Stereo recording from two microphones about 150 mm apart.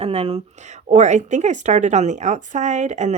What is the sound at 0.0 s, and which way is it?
A woman's voice, 45° right (ahead or behind).